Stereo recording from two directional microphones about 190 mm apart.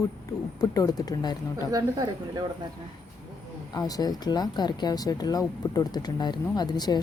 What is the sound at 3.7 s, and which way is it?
Speech, 20° left (ahead or behind).